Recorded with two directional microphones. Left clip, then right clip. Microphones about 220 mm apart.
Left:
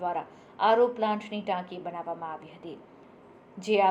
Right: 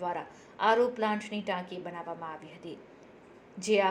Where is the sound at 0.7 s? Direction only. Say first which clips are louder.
Left 4 dB; 55° right (ahead or behind).